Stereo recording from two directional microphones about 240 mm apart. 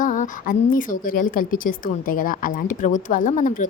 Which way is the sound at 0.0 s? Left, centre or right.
Left.